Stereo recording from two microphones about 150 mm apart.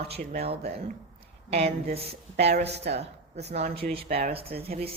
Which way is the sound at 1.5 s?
45° right (ahead or behind).